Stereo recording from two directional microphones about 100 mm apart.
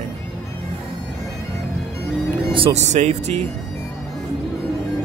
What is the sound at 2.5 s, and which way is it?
Speech, 75° right (ahead or behind).